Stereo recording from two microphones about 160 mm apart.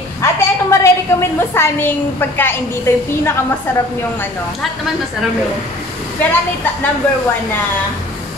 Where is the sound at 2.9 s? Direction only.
15° left (ahead or behind).